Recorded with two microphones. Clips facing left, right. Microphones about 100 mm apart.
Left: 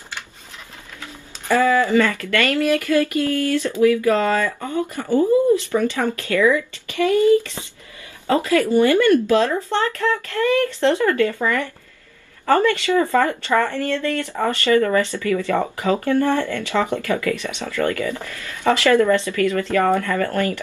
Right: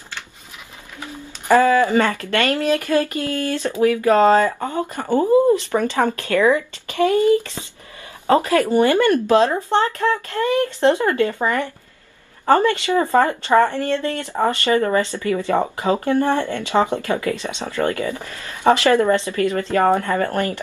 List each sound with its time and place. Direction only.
1.6 s speech: 20° right (ahead or behind)
4.5 s speech: 45° right (ahead or behind)
6.5 s speech: 25° right (ahead or behind)
8.6 s speech: 20° right (ahead or behind)